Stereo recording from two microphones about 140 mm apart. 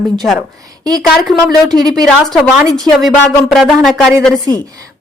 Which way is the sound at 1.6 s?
30° right (ahead or behind).